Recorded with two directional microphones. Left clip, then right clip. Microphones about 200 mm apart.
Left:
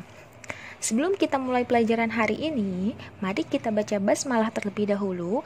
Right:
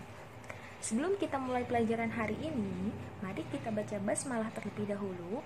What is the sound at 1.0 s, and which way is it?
A woman's voice, 40° left (ahead or behind).